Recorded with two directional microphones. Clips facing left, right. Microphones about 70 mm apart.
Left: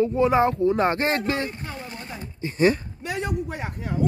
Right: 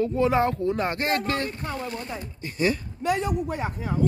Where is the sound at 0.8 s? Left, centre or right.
Left.